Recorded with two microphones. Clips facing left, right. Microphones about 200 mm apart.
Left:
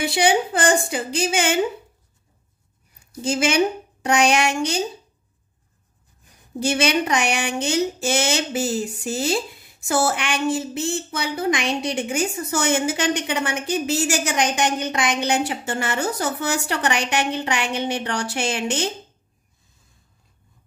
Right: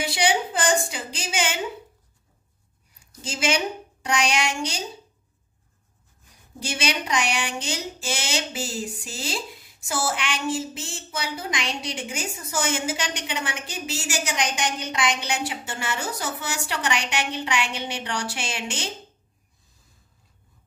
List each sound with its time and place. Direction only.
0.1 s a woman's voice: 55° left (ahead or behind)
3.3 s a woman's voice: 55° left (ahead or behind)
6.6 s a woman's voice: 60° left (ahead or behind)